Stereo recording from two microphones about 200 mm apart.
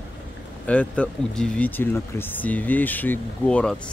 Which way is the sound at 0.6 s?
5° left (ahead or behind).